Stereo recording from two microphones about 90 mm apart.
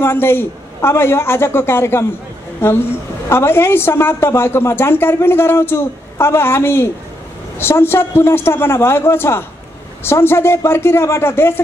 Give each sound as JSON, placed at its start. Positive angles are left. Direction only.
{"t": 0.0, "sound": "a woman's voice", "side_deg": 25}